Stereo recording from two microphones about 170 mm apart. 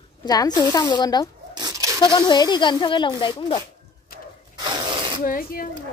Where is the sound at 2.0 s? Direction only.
25° left (ahead or behind).